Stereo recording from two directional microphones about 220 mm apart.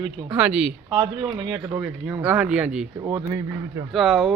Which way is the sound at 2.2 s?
5° right (ahead or behind).